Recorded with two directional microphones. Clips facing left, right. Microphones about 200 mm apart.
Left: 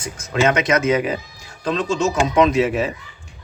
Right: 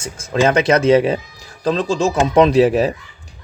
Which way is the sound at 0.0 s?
30° right (ahead or behind).